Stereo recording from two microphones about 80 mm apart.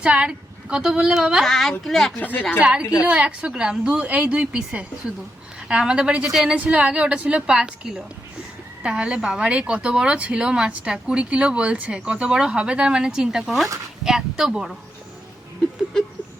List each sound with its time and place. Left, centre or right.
0.0 s speech: centre
2.2 s a woman's voice: left
2.6 s speech: centre